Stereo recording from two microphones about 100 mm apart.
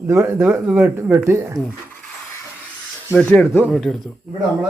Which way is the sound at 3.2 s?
10° left (ahead or behind).